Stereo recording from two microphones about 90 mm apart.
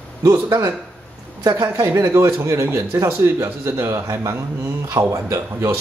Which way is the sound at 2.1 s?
30° right (ahead or behind).